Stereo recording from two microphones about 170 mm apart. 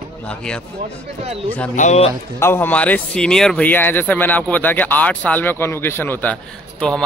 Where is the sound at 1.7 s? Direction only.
45° left (ahead or behind).